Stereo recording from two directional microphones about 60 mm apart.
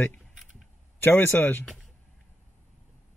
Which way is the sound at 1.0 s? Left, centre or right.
Left.